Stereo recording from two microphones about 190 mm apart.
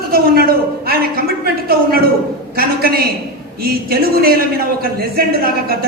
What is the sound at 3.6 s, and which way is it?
A man's voice, 55° right (ahead or behind).